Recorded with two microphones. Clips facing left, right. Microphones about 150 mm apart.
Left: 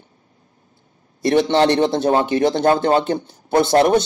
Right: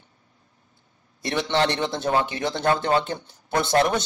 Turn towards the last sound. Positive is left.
turn(degrees=35)  # may be behind; listen again after turning